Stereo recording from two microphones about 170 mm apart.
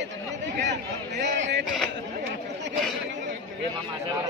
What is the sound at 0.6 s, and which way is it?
A man's voice, 90° right.